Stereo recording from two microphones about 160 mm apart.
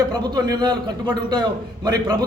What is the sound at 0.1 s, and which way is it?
A man's voice, 25° right (ahead or behind).